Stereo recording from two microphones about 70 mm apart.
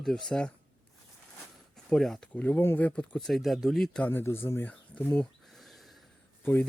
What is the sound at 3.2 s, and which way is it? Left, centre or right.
Speech, centre.